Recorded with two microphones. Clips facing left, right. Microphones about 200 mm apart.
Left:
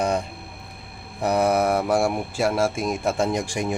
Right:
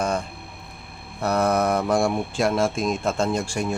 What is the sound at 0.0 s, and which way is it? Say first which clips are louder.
Speech: left 2 dB; 15° left (ahead or behind).